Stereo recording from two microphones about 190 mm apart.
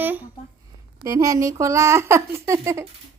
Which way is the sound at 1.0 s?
15° right (ahead or behind).